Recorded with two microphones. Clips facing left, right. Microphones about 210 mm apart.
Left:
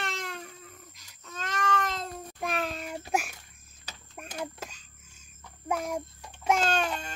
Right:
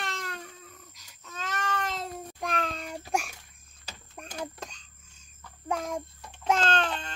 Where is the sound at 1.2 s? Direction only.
5° right (ahead or behind).